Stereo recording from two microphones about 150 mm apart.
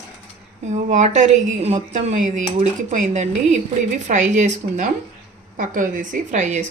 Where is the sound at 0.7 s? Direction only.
50° right (ahead or behind).